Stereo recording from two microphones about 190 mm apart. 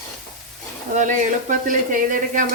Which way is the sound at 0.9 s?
40° right (ahead or behind).